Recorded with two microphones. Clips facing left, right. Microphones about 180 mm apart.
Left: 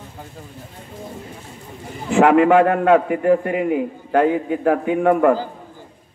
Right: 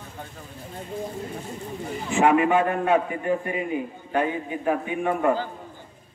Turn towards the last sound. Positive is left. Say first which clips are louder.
# left 8 dB
turn(degrees=70)  # may be behind; listen again after turning